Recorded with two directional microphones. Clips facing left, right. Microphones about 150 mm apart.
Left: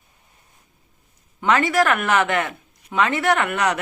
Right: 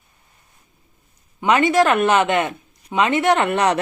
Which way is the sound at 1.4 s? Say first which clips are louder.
Right 3 dB; 20° right (ahead or behind).